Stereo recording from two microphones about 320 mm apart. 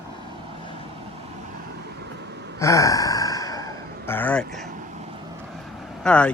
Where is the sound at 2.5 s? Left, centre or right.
Centre.